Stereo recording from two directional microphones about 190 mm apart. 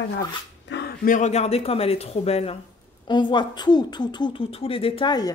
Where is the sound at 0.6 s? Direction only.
65° left (ahead or behind).